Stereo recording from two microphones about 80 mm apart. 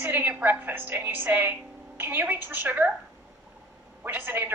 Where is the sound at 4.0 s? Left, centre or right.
Right.